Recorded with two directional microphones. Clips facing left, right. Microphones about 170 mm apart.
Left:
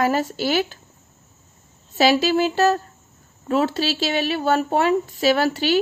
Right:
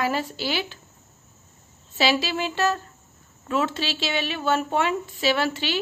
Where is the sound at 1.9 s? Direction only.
40° left (ahead or behind).